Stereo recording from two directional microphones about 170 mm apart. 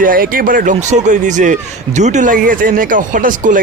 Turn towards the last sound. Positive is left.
turn(degrees=-50)  # may be behind; listen again after turning